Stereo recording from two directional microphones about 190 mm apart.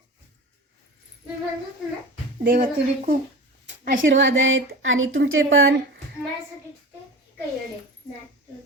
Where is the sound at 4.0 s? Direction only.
80° right.